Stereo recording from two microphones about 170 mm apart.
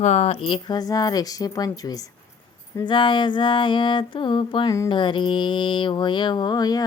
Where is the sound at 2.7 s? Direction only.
25° left (ahead or behind).